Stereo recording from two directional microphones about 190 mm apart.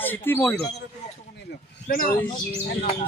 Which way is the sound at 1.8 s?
50° left (ahead or behind).